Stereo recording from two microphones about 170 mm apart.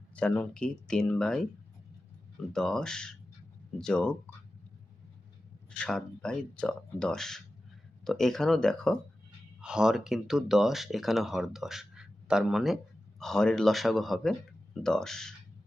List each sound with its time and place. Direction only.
0.2 s speech: 5° left (ahead or behind)
2.5 s speech: 5° left (ahead or behind)
5.8 s speech: 5° left (ahead or behind)